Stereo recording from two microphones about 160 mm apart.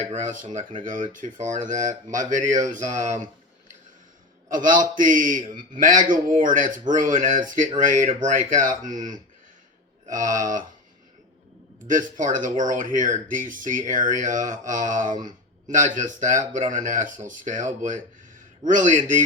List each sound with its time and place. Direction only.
0.1 s speech: 55° right (ahead or behind)
4.4 s speech: 55° right (ahead or behind)
11.9 s speech: 55° right (ahead or behind)